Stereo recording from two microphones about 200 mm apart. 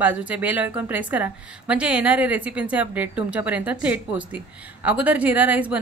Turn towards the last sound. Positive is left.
turn(degrees=-10)  # may be behind; listen again after turning